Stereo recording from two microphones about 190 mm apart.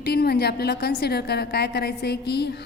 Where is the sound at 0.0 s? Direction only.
55° left (ahead or behind).